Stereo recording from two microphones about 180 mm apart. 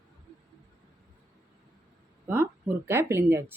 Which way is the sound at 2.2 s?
10° right (ahead or behind).